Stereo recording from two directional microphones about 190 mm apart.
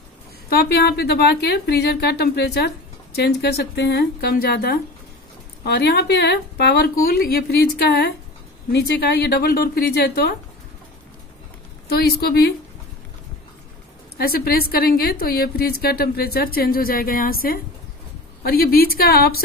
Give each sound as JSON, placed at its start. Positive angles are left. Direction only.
{"t": 0.5, "sound": "speech", "side_deg": 55}
{"t": 11.9, "sound": "speech", "side_deg": 55}
{"t": 14.1, "sound": "a woman's voice", "side_deg": 55}